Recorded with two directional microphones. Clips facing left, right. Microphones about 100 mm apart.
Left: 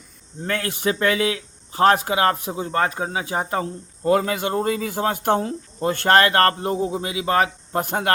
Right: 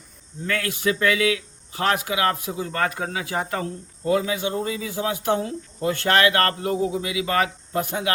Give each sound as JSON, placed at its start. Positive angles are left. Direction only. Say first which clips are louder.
{"t": 0.4, "sound": "speech", "louder": "left 1 dB", "side_deg": 35}
{"t": 4.2, "sound": "speech", "louder": "left 3 dB", "side_deg": 60}